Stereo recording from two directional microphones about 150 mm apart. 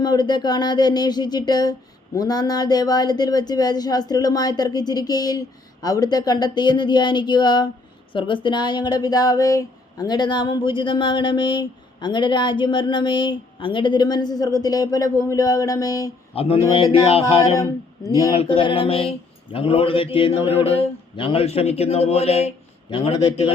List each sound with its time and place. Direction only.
0.0 s speech: 30° left (ahead or behind)
16.3 s speech: 40° left (ahead or behind)
17.6 s speech: 25° left (ahead or behind)
18.3 s speech: 40° left (ahead or behind)